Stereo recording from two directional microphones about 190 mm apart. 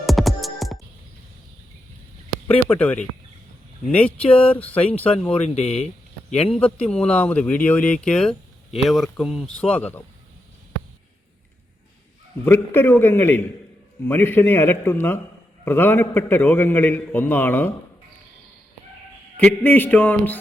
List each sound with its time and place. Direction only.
0.0 s music: centre (ahead or behind)
2.6 s a man's voice: 10° left (ahead or behind)
4.3 s speech: 30° left (ahead or behind)
4.5 s a man's voice: 5° left (ahead or behind)
5.3 s speech: 35° left (ahead or behind)
6.9 s a man's voice: 5° left (ahead or behind)
12.5 s a man's voice: 10° left (ahead or behind)
19.4 s a man's voice: 10° left (ahead or behind)